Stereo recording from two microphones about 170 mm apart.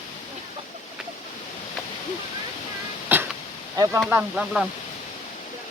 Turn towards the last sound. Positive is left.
turn(degrees=-5)  # may be behind; listen again after turning